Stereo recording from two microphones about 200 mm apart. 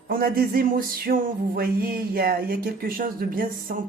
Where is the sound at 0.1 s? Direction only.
45° right (ahead or behind).